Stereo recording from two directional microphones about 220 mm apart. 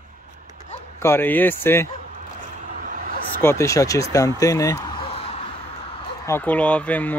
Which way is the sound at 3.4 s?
15° left (ahead or behind).